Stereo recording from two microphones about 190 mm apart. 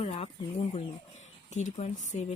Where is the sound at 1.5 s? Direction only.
35° left (ahead or behind).